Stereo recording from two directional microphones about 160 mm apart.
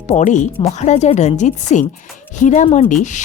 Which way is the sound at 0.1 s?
50° left (ahead or behind).